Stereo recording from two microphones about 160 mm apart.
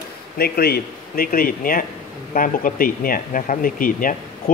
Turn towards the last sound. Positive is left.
turn(degrees=60)  # may be behind; listen again after turning